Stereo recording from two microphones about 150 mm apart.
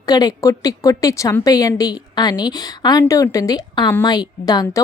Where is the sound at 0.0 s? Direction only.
25° left (ahead or behind).